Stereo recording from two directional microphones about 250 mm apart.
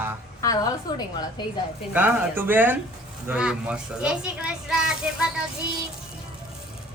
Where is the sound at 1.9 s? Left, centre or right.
Centre.